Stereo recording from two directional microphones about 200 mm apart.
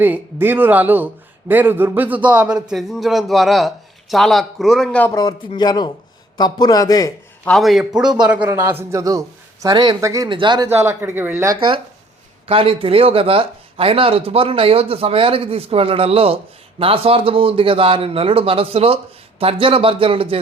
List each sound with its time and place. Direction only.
0.0 s a man's voice: 10° right (ahead or behind)
5.1 s speech: 20° left (ahead or behind)
7.4 s a man's voice: centre (ahead or behind); by 10.7 s 25° right (ahead or behind)
10.8 s speech: 10° right (ahead or behind)
12.5 s speech: 30° right (ahead or behind)